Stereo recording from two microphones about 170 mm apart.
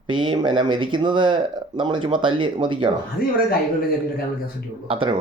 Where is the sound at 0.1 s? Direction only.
30° right (ahead or behind).